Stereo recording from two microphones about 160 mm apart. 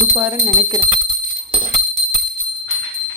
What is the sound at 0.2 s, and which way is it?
Speech, 20° right (ahead or behind).